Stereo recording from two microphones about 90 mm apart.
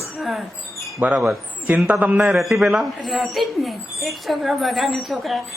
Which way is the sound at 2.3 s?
Centre (ahead or behind).